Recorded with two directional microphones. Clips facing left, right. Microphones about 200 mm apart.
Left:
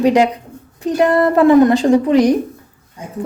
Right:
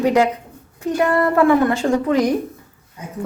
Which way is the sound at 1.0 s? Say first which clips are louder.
Left 4 dB; 30° left (ahead or behind).